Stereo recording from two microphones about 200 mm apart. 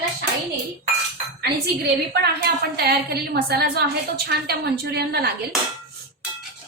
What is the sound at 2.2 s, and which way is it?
A woman's voice, 50° right (ahead or behind).